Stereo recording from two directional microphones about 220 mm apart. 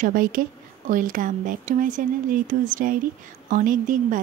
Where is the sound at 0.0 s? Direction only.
40° right (ahead or behind).